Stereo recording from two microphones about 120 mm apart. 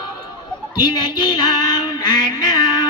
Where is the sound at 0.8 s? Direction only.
35° left (ahead or behind).